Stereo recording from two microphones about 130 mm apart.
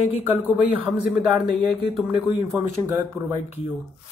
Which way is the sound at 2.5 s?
10° right (ahead or behind).